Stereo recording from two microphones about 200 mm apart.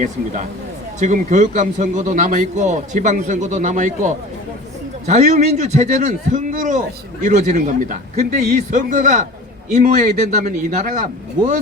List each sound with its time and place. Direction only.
0.9 s a man's voice: 35° right (ahead or behind)